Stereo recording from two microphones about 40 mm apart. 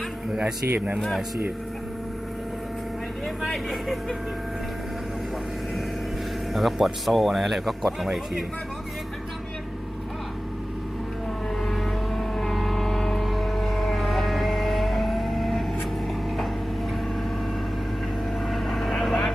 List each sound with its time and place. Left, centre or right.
3.4 s speech: centre
6.5 s speech: centre
11.6 s music: centre
18.4 s vehicle: centre